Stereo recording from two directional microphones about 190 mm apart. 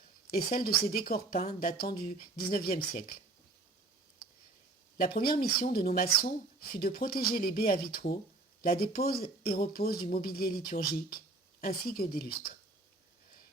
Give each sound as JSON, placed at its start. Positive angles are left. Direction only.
{"t": 0.3, "sound": "speech", "side_deg": 50}
{"t": 4.9, "sound": "speech", "side_deg": 55}